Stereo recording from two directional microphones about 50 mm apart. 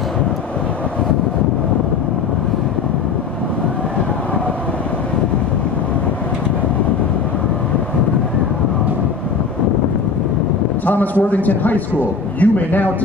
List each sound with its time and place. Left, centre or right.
11.2 s a man's voice: left